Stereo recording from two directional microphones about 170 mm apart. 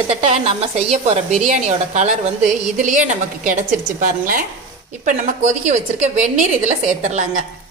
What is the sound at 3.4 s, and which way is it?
Speech, 50° right (ahead or behind).